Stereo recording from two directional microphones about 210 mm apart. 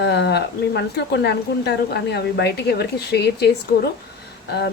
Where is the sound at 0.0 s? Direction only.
55° left (ahead or behind).